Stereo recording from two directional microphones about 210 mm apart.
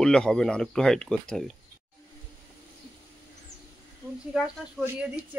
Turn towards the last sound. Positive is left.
turn(degrees=-5)  # may be behind; listen again after turning